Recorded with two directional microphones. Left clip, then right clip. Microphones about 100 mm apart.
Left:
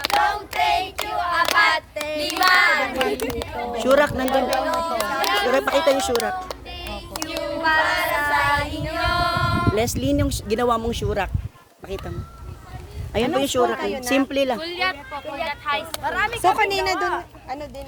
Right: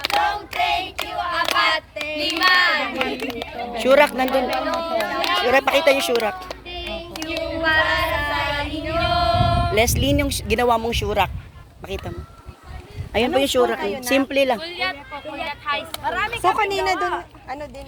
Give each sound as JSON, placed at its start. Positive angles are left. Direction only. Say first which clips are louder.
{"t": 0.0, "sound": "child singing", "louder": "even", "side_deg": 45}
{"t": 3.8, "sound": "speech", "louder": "right 3 dB", "side_deg": 5}
{"t": 4.6, "sound": "speech", "louder": "left 1 dB", "side_deg": 30}
{"t": 5.0, "sound": "a sound", "louder": "even", "side_deg": 30}
{"t": 5.5, "sound": "speech", "louder": "right 4 dB", "side_deg": 10}
{"t": 6.5, "sound": "music", "louder": "right 3 dB", "side_deg": 40}
{"t": 7.6, "sound": "child singing", "louder": "right 1 dB", "side_deg": 40}
{"t": 9.7, "sound": "speech", "louder": "right 3 dB", "side_deg": 5}
{"t": 13.1, "sound": "speech", "louder": "right 2 dB", "side_deg": 0}
{"t": 13.7, "sound": "speech", "louder": "right 1 dB", "side_deg": 35}
{"t": 14.3, "sound": "speech", "louder": "right 3 dB", "side_deg": 5}
{"t": 14.6, "sound": "speech", "louder": "left 1 dB", "side_deg": 55}
{"t": 16.7, "sound": "speech", "louder": "right 1 dB", "side_deg": 25}